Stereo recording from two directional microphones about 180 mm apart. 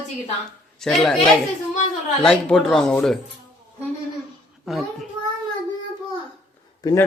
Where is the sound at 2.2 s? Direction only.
5° left (ahead or behind).